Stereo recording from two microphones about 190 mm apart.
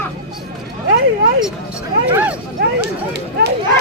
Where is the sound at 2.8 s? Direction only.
60° right (ahead or behind).